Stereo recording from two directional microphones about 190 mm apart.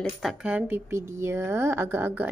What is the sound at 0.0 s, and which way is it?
Speech, centre (ahead or behind).